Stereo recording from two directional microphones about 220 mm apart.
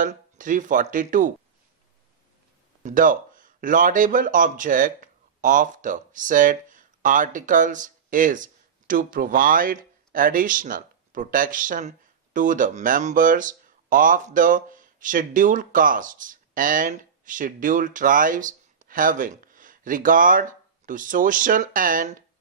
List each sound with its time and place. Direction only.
0.0 s speech: 35° right (ahead or behind)
2.8 s speech: 35° right (ahead or behind)